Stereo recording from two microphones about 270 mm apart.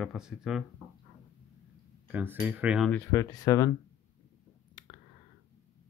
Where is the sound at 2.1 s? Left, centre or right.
Centre.